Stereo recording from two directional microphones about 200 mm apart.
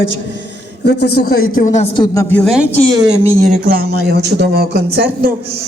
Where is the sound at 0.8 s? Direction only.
55° left (ahead or behind); by 1.8 s 40° left (ahead or behind).